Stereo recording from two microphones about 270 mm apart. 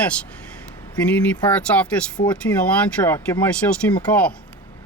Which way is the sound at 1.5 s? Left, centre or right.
Centre.